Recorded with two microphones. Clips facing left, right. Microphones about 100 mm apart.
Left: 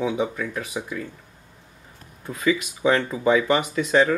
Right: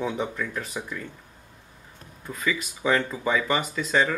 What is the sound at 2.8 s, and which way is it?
Speech, 20° left (ahead or behind).